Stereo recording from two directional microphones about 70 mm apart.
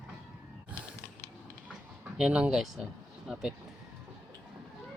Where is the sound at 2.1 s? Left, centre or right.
Centre.